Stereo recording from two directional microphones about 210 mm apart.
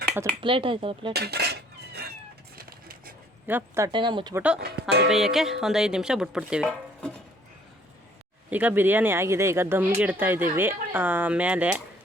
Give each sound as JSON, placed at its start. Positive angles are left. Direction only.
{"t": 0.4, "sound": "speech", "side_deg": -25}
{"t": 1.1, "sound": "cutlery", "side_deg": -50}
{"t": 2.6, "sound": "a sound", "side_deg": -45}
{"t": 3.4, "sound": "speech", "side_deg": -10}
{"t": 4.4, "sound": "chopping", "side_deg": -5}
{"t": 4.6, "sound": "speech", "side_deg": -50}
{"t": 5.0, "sound": "chopping", "side_deg": 0}
{"t": 8.4, "sound": "speech", "side_deg": -10}